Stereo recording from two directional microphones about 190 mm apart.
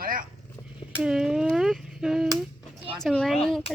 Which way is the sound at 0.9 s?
5° right (ahead or behind).